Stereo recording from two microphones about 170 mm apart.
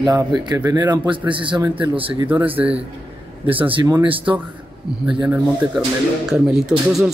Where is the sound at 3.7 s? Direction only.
25° right (ahead or behind).